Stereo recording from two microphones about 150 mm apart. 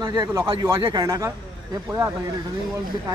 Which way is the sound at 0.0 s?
25° right (ahead or behind).